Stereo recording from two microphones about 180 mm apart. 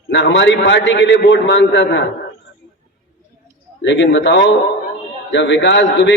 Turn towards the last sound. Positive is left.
turn(degrees=80)